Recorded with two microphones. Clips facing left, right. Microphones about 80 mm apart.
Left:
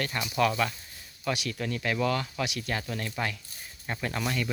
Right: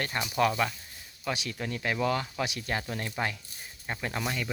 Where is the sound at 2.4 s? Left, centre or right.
Right.